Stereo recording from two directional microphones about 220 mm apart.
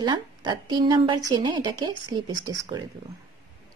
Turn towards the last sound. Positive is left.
turn(degrees=-20)  # may be behind; listen again after turning